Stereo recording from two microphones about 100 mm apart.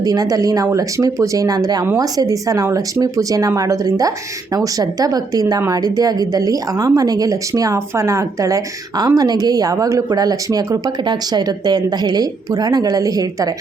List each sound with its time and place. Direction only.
0.0 s speech: 40° right (ahead or behind)